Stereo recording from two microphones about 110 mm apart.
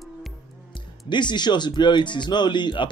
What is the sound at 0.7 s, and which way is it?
A man's voice, 45° left (ahead or behind).